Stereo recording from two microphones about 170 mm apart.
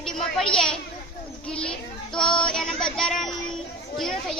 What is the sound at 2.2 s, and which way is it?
Female singing, 30° left (ahead or behind).